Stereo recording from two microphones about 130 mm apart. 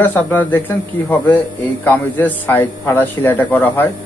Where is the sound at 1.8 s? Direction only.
15° left (ahead or behind).